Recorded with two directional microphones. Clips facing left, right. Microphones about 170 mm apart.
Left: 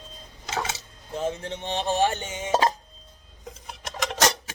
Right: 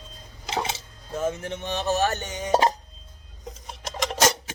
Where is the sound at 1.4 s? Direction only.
25° left (ahead or behind).